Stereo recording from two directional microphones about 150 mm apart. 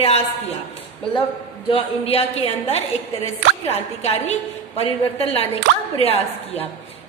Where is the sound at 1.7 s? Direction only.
40° left (ahead or behind).